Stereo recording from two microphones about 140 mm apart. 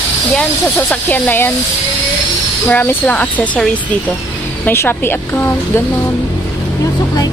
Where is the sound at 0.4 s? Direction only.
10° left (ahead or behind).